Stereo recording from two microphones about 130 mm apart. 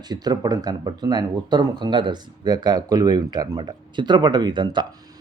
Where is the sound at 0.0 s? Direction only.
30° right (ahead or behind).